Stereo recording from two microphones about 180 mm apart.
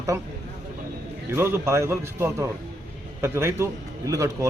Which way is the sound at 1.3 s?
15° right (ahead or behind).